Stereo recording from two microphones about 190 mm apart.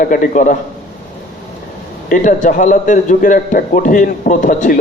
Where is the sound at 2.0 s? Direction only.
45° left (ahead or behind).